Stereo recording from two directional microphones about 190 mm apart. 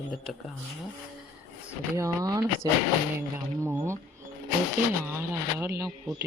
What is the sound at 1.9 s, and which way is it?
Speech, 20° right (ahead or behind).